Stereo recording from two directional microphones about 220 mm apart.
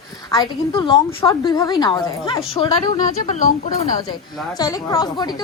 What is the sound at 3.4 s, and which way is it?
Speech, 35° left (ahead or behind).